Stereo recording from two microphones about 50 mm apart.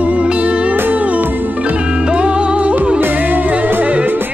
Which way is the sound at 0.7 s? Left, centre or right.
Right.